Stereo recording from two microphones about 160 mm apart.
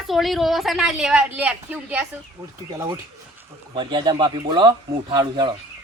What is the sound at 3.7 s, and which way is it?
Speech, 30° right (ahead or behind).